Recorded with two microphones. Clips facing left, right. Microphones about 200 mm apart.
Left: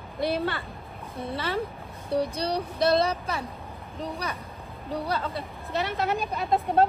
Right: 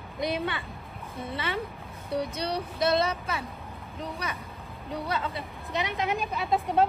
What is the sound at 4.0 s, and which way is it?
Speech, 30° left (ahead or behind).